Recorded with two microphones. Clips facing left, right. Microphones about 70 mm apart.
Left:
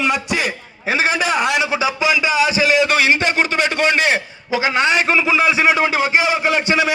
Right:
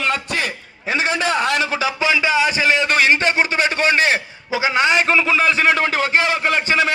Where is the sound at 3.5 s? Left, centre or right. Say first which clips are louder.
Left 1 dB; centre.